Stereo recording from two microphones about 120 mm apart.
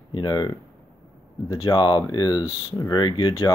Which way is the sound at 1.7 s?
40° left (ahead or behind).